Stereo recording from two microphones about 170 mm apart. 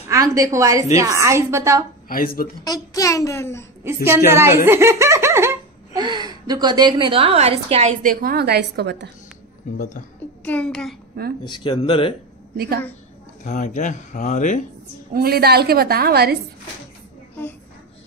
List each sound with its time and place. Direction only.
0.1 s a woman's voice: 20° right (ahead or behind)
0.9 s laughter: 20° right (ahead or behind)
2.0 s speech: 60° left (ahead or behind)
2.6 s a child's voice: 20° left (ahead or behind)
3.8 s laughter: 15° right (ahead or behind)
5.9 s a woman's voice: 25° right (ahead or behind); by 9.1 s 85° right
10.4 s a child's voice: 5° left (ahead or behind)
11.4 s a child's voice: 25° left (ahead or behind)
12.5 s a woman's voice: 65° right (ahead or behind)
13.4 s speech: 50° left (ahead or behind)
15.1 s a woman's voice: 65° right (ahead or behind)